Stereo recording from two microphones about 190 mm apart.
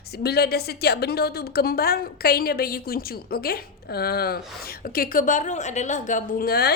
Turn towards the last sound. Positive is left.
turn(degrees=55)  # may be behind; listen again after turning